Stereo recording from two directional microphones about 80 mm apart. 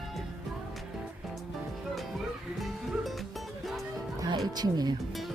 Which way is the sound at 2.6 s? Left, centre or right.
Centre.